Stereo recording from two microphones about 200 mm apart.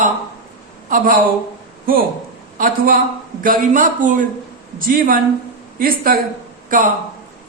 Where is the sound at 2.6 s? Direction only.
45° right (ahead or behind).